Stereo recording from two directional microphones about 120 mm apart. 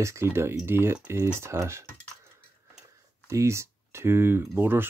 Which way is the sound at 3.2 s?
25° right (ahead or behind).